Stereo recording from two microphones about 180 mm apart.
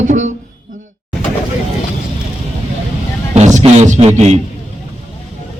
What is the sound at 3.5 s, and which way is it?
Beatboxing, 40° right (ahead or behind).